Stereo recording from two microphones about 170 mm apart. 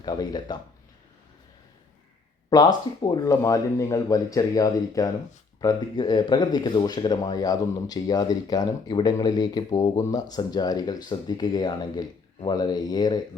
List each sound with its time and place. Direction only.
0.0 s speech: 25° left (ahead or behind)
3.0 s speech: 20° left (ahead or behind)